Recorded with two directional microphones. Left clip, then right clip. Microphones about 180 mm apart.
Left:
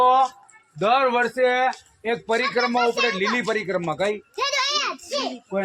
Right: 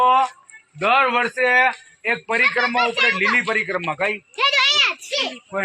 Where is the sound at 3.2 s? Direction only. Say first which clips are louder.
Right 5 dB; 25° left (ahead or behind).